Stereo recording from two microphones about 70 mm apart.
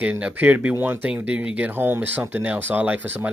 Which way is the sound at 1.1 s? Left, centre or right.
Centre.